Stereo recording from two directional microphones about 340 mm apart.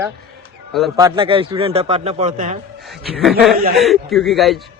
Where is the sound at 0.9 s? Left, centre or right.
Centre.